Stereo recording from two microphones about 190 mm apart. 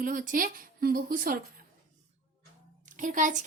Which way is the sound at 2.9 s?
45° right (ahead or behind).